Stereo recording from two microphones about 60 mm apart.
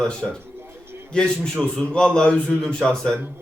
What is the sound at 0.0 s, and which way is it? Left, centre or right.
A man's voice, centre.